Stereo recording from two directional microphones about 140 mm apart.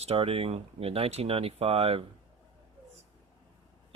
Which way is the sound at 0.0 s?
45° right (ahead or behind).